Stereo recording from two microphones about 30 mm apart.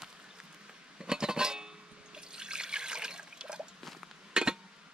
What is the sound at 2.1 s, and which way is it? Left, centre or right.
Water, right.